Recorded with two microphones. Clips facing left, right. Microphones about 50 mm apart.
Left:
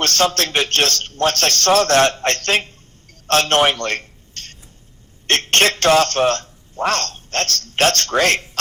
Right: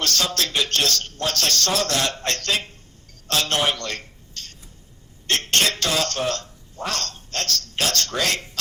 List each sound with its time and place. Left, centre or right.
0.0 s a man's voice: left
3.1 s a sound: left
5.2 s a woman's voice: left